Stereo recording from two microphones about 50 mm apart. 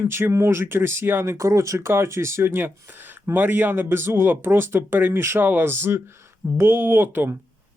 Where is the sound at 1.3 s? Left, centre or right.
Right.